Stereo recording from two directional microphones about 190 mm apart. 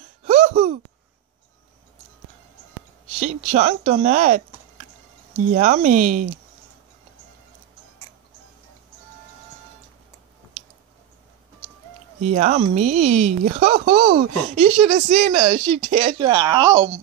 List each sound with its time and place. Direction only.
0.2 s a sound: 35° right (ahead or behind)
3.2 s speech: 40° right (ahead or behind)
12.2 s speech: 40° right (ahead or behind); by 17.0 s 20° right (ahead or behind)